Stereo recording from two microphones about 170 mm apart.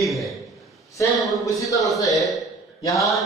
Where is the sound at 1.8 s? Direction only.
Centre (ahead or behind).